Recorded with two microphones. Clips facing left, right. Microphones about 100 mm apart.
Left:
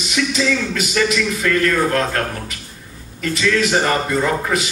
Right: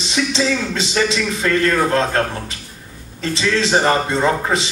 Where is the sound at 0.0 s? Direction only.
25° right (ahead or behind).